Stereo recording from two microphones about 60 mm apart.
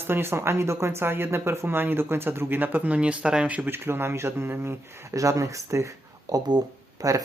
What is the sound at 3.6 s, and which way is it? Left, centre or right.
Speech, right.